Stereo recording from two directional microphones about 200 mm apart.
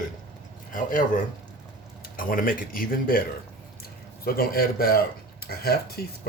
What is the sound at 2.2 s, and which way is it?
Speech, 45° left (ahead or behind).